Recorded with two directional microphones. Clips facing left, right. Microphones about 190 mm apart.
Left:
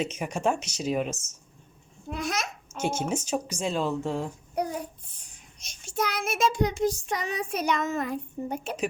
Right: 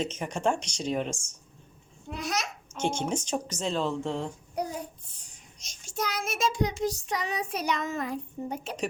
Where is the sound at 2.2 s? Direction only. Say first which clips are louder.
Left 1 dB; 50° left (ahead or behind).